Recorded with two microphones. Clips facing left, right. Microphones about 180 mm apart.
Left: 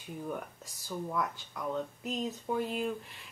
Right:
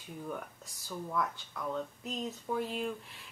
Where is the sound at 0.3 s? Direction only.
5° left (ahead or behind).